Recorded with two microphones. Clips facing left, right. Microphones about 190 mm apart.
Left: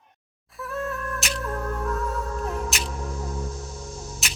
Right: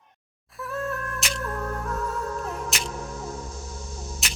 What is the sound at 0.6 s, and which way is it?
Music, centre (ahead or behind).